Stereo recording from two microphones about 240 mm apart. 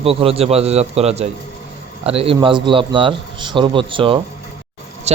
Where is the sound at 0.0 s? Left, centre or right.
Right.